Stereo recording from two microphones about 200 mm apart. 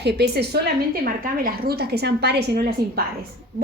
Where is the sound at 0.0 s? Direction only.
55° right (ahead or behind).